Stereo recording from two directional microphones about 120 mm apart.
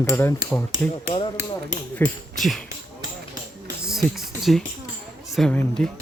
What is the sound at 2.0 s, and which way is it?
Speech, 20° left (ahead or behind).